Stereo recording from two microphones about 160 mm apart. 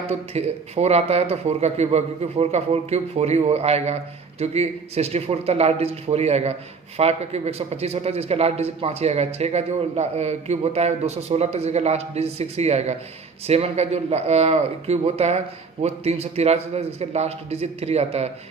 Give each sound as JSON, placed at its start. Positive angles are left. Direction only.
{"t": 0.1, "sound": "a man's voice", "side_deg": -40}